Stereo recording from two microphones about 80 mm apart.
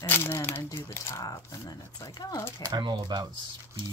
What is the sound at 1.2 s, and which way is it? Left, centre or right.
Speech, left.